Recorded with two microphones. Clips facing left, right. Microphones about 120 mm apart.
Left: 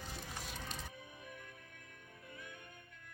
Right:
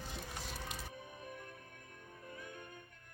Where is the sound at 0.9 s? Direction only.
45° right (ahead or behind).